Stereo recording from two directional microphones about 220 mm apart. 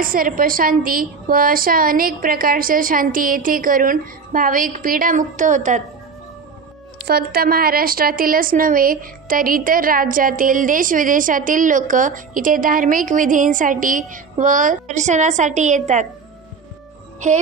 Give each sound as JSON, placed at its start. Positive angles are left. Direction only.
{"t": 0.0, "sound": "a woman's voice", "side_deg": -40}
{"t": 7.1, "sound": "a woman's voice", "side_deg": -45}